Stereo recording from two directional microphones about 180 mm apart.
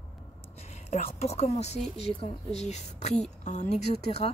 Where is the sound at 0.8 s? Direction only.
35° left (ahead or behind).